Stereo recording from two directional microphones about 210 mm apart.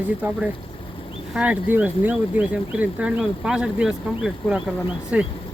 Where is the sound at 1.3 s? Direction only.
5° right (ahead or behind).